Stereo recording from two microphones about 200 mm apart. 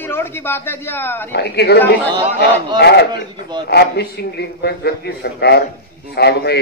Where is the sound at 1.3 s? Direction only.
55° left (ahead or behind).